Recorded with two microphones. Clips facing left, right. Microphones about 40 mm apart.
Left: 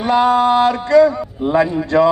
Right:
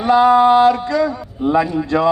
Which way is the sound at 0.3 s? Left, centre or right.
Centre.